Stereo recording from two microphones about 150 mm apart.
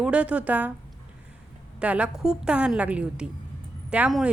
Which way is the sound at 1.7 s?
10° right (ahead or behind).